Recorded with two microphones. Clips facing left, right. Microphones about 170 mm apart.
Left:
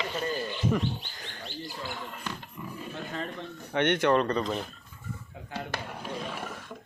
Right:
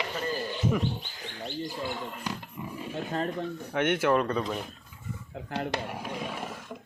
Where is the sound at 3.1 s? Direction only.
40° right (ahead or behind).